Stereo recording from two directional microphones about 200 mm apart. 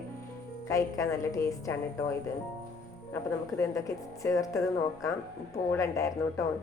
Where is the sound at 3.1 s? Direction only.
15° left (ahead or behind).